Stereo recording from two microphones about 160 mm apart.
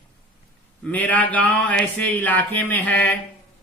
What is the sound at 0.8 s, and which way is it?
A man's voice, 10° left (ahead or behind).